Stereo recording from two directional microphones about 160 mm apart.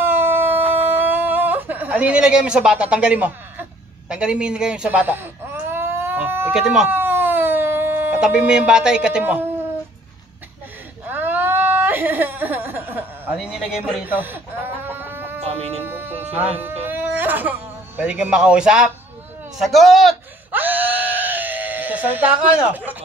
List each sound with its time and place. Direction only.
0.0 s a sound: 15° right (ahead or behind)
4.1 s baby cry: 5° right (ahead or behind)
6.5 s a sound: 5° right (ahead or behind)
11.1 s a sound: 10° right (ahead or behind)
14.0 s speech: 10° right (ahead or behind)
14.9 s chicken: 15° right (ahead or behind)
15.4 s speech: 40° right (ahead or behind)
15.8 s music: 15° right (ahead or behind)
19.6 s a man's voice: centre (ahead or behind)
20.5 s screaming: 10° right (ahead or behind)